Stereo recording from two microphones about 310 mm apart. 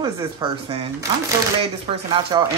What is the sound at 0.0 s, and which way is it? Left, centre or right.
Speech, centre.